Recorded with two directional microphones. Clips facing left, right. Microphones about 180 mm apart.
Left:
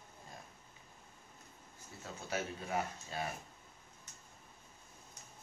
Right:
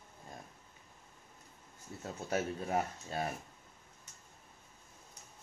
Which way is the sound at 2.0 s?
40° right (ahead or behind).